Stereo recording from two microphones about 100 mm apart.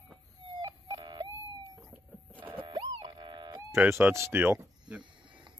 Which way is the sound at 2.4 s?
60° right (ahead or behind).